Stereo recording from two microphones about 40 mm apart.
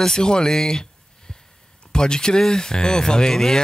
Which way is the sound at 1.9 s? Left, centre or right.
Centre.